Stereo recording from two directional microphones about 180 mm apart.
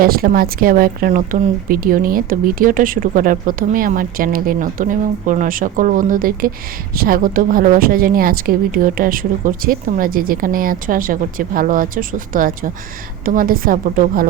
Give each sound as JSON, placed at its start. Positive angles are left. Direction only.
{"t": 0.0, "sound": "a woman's voice", "side_deg": -55}